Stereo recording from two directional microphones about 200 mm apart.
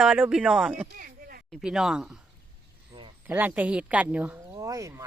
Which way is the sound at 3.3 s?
10° right (ahead or behind).